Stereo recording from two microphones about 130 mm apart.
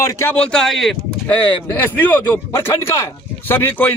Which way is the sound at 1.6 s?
15° left (ahead or behind).